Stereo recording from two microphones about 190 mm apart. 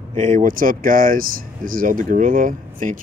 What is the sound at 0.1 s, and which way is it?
Speech, 40° right (ahead or behind).